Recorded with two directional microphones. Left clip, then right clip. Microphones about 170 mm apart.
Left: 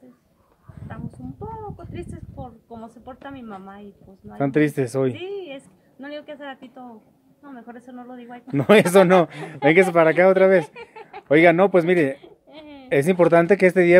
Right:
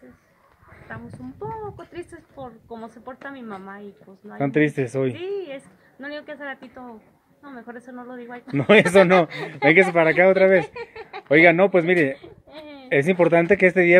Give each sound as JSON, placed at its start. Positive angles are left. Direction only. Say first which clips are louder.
{"t": 0.8, "sound": "a sound", "louder": "right 1 dB", "side_deg": -5}
{"t": 2.0, "sound": "a woman's voice", "louder": "even", "side_deg": -5}
{"t": 4.4, "sound": "speech", "louder": "even", "side_deg": 25}
{"t": 5.1, "sound": "a woman's voice", "louder": "right 2 dB", "side_deg": -5}
{"t": 8.5, "sound": "speech", "louder": "even", "side_deg": 25}
{"t": 10.7, "sound": "a sound", "louder": "right 4 dB", "side_deg": -40}
{"t": 11.2, "sound": "speech", "louder": "even", "side_deg": 25}
{"t": 12.5, "sound": "a sound", "louder": "right 2 dB", "side_deg": -15}
{"t": 12.8, "sound": "speech", "louder": "left 1 dB", "side_deg": 25}